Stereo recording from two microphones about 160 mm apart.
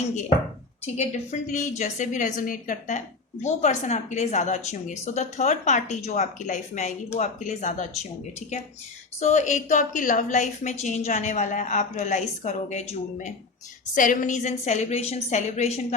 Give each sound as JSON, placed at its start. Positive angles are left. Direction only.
{"t": 0.9, "sound": "a woman's voice", "side_deg": 50}